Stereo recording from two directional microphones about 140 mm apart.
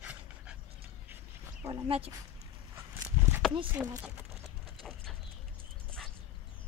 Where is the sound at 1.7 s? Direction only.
45° right (ahead or behind).